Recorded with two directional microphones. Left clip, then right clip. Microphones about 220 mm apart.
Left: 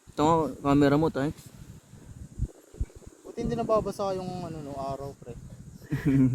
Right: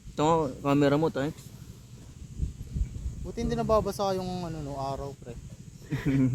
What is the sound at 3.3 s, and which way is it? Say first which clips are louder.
Speech: even; 20° right (ahead or behind).